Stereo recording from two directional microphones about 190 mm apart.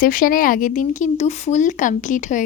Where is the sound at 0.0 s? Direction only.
45° left (ahead or behind).